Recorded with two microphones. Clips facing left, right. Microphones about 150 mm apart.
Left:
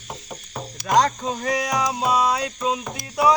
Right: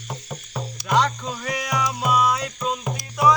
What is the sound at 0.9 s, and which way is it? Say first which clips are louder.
Music: left 3 dB; 40° left (ahead or behind).